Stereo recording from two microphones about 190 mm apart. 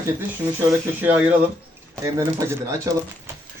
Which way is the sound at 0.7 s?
10° right (ahead or behind).